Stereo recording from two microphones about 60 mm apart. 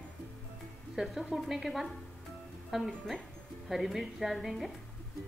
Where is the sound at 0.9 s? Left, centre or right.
Centre.